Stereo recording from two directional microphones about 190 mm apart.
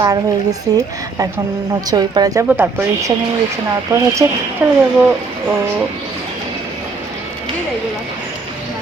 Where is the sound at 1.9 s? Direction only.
20° right (ahead or behind).